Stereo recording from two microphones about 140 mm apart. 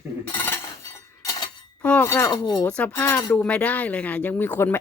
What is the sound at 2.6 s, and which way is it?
Speech, 10° left (ahead or behind).